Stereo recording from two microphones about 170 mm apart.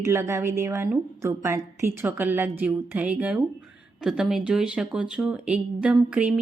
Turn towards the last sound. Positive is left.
turn(degrees=-5)  # may be behind; listen again after turning